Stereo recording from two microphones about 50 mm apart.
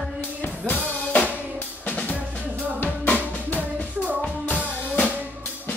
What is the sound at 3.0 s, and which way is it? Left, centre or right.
Music, left.